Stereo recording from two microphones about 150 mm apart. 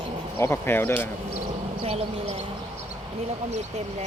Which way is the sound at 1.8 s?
40° right (ahead or behind).